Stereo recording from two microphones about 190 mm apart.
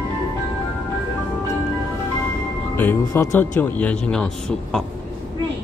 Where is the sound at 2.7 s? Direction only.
10° left (ahead or behind).